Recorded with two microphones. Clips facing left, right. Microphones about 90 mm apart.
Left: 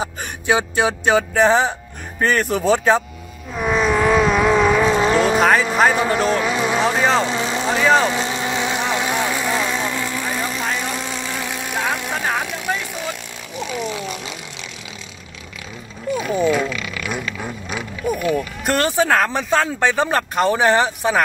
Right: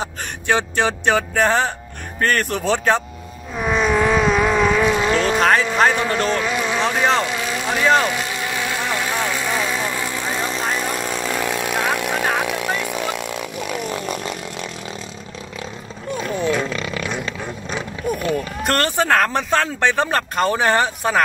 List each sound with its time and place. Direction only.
0.0 s speech: 10° left (ahead or behind)
3.5 s vehicle: centre (ahead or behind)
4.8 s vehicle: 30° left (ahead or behind)
5.1 s speech: 5° left (ahead or behind)
7.2 s vehicle: 25° left (ahead or behind)
7.7 s speech: centre (ahead or behind)
8.1 s vehicle: 25° left (ahead or behind); by 9.8 s centre (ahead or behind)
9.8 s vehicle: 15° right (ahead or behind)
11.3 s vehicle: 60° right (ahead or behind)
12.4 s chainsaw: 65° right (ahead or behind)
16.2 s speech: 10° left (ahead or behind)
16.6 s roaring cats: 35° right (ahead or behind)
17.6 s vehicle: 5° left (ahead or behind)
18.6 s speech: centre (ahead or behind)